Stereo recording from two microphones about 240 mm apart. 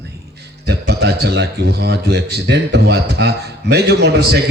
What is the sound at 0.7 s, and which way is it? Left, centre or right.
Speech, right.